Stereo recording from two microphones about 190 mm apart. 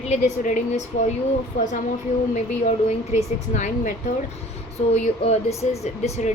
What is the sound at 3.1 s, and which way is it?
Speech, 35° left (ahead or behind).